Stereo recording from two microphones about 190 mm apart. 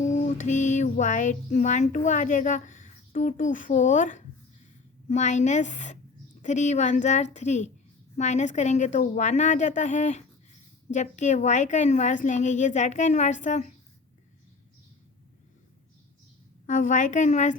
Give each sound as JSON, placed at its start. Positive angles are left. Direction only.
{"t": 0.0, "sound": "a sound", "side_deg": 40}
{"t": 2.0, "sound": "a woman's voice", "side_deg": 40}
{"t": 16.6, "sound": "a woman's voice", "side_deg": 40}